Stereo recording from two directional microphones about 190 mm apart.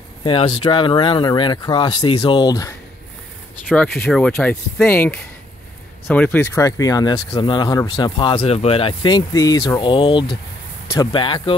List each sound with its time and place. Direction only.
0.2 s speech: 30° left (ahead or behind)
3.6 s speech: 5° left (ahead or behind); by 11.5 s 25° left (ahead or behind)